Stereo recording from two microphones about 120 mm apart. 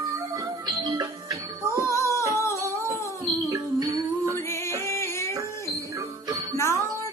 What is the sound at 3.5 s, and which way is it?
Music, 30° right (ahead or behind).